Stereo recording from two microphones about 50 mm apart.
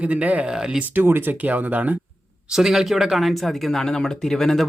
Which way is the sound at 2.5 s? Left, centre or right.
Centre.